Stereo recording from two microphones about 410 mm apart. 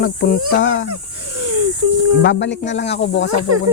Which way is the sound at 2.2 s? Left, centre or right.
Left.